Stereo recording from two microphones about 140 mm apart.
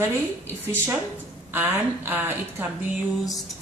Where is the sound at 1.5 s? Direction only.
15° right (ahead or behind).